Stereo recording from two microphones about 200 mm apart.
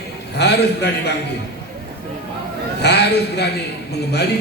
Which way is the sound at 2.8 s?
55° left (ahead or behind).